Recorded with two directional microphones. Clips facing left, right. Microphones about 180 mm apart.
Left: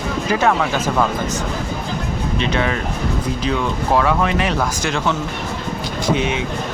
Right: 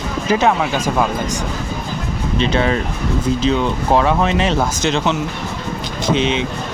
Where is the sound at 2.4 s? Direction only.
30° right (ahead or behind).